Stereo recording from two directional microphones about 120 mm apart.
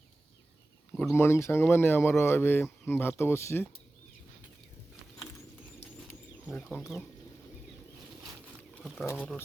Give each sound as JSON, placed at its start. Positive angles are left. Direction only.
{"t": 1.1, "sound": "speech", "side_deg": 20}
{"t": 6.4, "sound": "speech", "side_deg": 15}
{"t": 9.0, "sound": "speech", "side_deg": 10}